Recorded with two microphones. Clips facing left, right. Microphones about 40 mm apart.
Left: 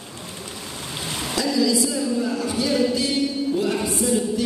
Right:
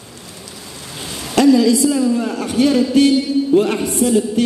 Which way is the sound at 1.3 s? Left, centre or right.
Right.